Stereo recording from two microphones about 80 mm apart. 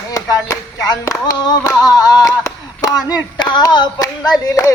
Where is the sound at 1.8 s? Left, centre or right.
Left.